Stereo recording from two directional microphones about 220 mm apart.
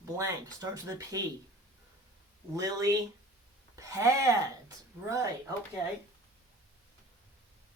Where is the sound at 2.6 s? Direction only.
15° right (ahead or behind).